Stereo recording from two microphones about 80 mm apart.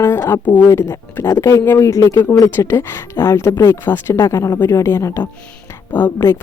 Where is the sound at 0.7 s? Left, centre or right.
Left.